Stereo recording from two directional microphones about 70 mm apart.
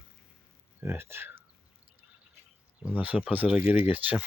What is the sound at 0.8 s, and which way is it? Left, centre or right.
Speech, right.